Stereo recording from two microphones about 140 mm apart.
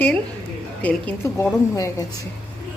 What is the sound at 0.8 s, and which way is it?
A woman's voice, 10° left (ahead or behind).